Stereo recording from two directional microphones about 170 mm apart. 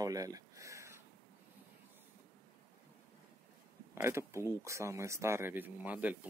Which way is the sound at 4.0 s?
15° right (ahead or behind).